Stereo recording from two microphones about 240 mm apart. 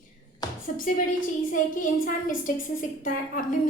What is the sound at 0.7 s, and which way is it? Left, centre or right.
A woman's voice, left.